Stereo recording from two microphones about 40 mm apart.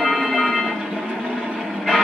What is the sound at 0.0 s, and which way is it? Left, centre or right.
Music, centre.